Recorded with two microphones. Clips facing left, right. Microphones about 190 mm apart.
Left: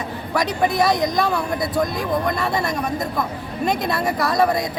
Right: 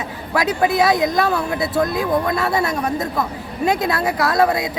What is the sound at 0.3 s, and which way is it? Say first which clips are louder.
Speech: right 2 dB; 5° right (ahead or behind).